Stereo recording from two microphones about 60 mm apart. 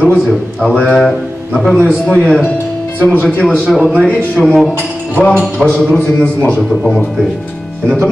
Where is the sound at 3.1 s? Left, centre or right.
Left.